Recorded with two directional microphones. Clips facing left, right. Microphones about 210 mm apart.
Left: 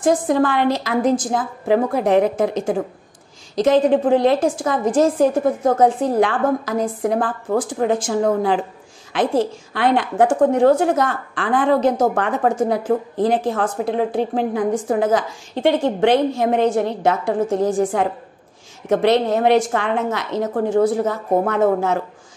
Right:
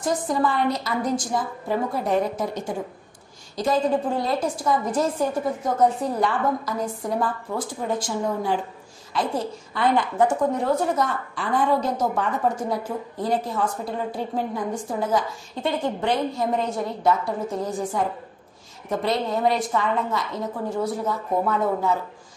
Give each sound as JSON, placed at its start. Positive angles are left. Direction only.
{"t": 0.0, "sound": "a woman's voice", "side_deg": 90}